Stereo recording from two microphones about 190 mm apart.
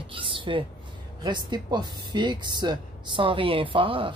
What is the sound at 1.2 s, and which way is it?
Speech, 25° right (ahead or behind).